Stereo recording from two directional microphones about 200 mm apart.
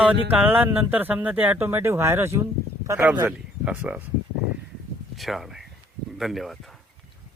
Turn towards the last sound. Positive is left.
turn(degrees=0)  # may be behind; listen again after turning